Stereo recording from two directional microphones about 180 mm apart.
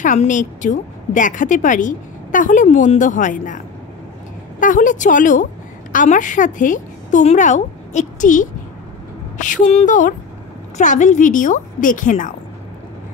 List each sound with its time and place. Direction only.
0.0 s a woman's voice: 45° left (ahead or behind)